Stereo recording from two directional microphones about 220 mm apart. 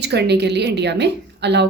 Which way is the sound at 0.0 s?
50° right (ahead or behind).